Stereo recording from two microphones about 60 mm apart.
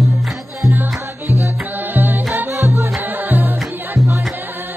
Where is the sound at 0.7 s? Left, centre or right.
Right.